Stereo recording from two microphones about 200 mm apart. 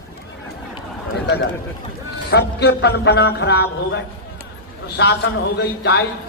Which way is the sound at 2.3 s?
55° left (ahead or behind).